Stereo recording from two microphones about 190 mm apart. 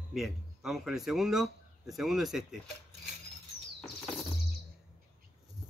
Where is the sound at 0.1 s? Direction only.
Centre (ahead or behind).